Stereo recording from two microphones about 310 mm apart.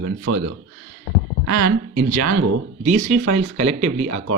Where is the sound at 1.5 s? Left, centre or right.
Right.